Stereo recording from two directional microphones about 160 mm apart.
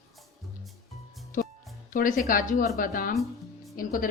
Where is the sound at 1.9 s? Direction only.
55° left (ahead or behind).